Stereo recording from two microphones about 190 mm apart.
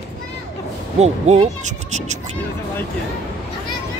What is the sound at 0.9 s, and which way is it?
Speech, 35° right (ahead or behind).